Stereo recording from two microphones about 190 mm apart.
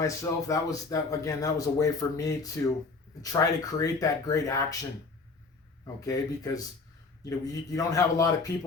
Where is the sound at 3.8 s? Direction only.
20° left (ahead or behind).